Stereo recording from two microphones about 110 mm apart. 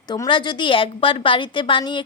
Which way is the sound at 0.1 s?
45° left (ahead or behind).